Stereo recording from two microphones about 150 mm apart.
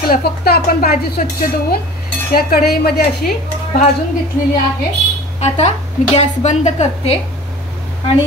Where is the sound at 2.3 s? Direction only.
85° left.